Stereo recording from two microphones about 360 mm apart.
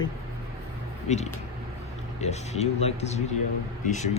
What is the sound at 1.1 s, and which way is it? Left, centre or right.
Speech, centre.